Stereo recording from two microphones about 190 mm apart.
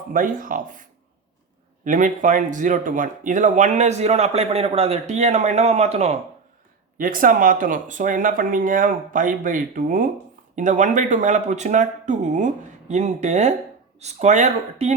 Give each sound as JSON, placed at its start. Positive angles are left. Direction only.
{"t": 0.1, "sound": "speech", "side_deg": -45}
{"t": 6.9, "sound": "speech", "side_deg": -45}